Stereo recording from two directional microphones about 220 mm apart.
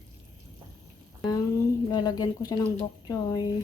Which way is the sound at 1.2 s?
15° left (ahead or behind).